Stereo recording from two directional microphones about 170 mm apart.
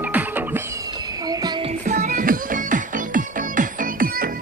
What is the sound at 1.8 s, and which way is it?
Music, 45° right (ahead or behind).